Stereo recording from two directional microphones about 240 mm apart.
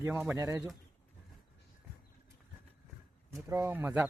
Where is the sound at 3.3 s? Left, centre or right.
Centre.